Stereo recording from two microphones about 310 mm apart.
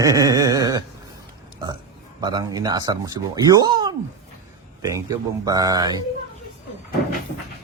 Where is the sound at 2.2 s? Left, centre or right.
Centre.